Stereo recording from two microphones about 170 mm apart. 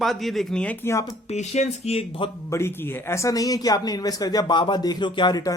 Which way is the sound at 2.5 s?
15° left (ahead or behind).